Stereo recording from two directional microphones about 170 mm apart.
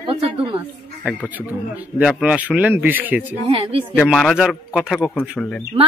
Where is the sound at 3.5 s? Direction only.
35° right (ahead or behind).